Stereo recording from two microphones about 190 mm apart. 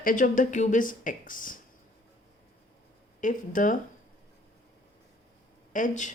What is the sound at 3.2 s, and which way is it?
Speech, 45° left (ahead or behind).